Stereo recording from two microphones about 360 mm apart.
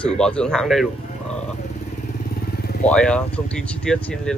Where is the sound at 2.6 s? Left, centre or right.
Left.